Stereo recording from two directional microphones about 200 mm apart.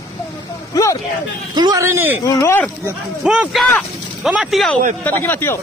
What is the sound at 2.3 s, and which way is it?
Speech, 15° left (ahead or behind).